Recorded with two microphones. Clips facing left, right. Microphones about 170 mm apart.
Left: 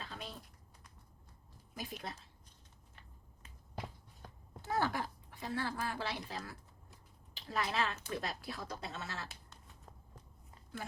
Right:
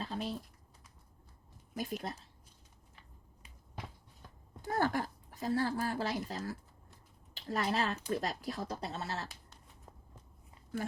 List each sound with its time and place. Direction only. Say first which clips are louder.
0.0 s a sound: right 9 dB; 40° right (ahead or behind)
1.7 s speech: right 6 dB; 45° right (ahead or behind)
4.7 s speech: right 3 dB; 50° right (ahead or behind)